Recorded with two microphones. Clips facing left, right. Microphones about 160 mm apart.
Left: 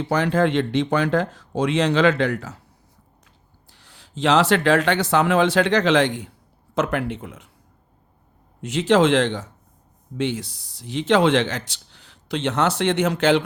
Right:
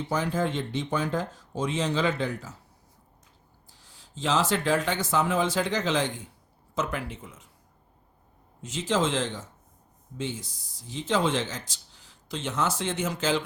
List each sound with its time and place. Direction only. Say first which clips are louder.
0.0 s speech: left 8 dB; 70° left (ahead or behind)
3.7 s speech: left 6 dB; 70° left (ahead or behind)
8.6 s speech: left 9 dB; 70° left (ahead or behind)